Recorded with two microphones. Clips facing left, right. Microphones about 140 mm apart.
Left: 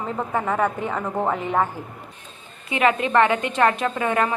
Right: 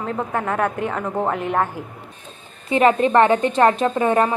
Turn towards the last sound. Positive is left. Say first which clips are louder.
# right 4 dB
turn(degrees=-30)  # may be behind; listen again after turning